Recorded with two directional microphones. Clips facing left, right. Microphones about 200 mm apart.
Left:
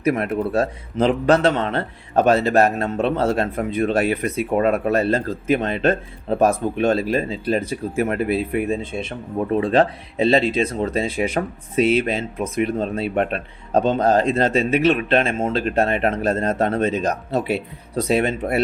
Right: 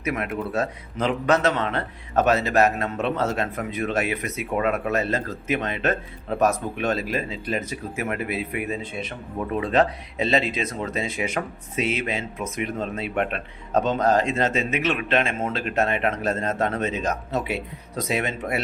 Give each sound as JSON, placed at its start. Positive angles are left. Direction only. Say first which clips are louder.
{"t": 0.0, "sound": "speech", "louder": "left 7 dB", "side_deg": 35}